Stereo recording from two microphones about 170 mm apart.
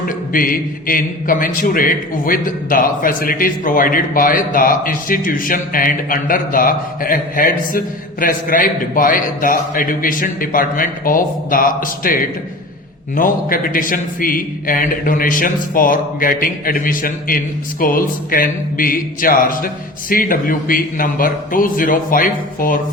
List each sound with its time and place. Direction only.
0.1 s a man's voice: 55° left (ahead or behind)